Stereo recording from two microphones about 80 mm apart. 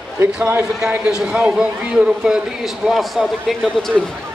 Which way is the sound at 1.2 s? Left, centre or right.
Centre.